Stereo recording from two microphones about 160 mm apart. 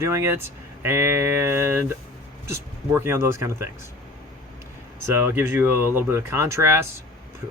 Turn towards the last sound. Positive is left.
turn(degrees=-15)  # may be behind; listen again after turning